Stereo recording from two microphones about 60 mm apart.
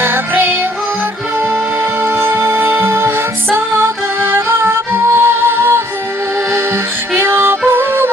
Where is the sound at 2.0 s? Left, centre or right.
Right.